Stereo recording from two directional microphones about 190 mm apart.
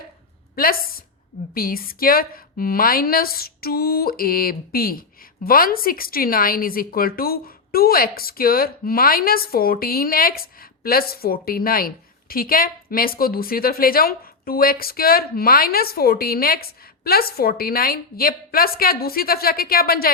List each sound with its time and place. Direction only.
0.5 s a woman's voice: 50° left (ahead or behind)